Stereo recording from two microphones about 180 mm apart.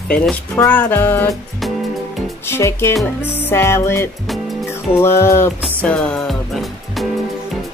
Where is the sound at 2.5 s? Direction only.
15° left (ahead or behind).